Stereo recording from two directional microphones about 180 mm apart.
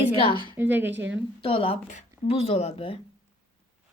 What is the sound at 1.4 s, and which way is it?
Speech, 30° left (ahead or behind).